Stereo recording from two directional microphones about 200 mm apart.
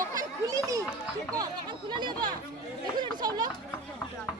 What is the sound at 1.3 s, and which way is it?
Speech, 20° right (ahead or behind).